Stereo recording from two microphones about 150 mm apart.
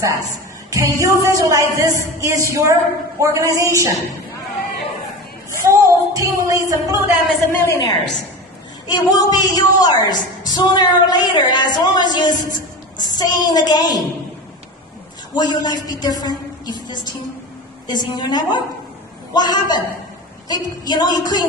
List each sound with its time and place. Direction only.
0.0 s a woman's voice: 20° right (ahead or behind)
5.6 s a sound: 20° right (ahead or behind)
7.6 s a woman's voice: 20° left (ahead or behind)
15.3 s a woman's voice: 30° left (ahead or behind)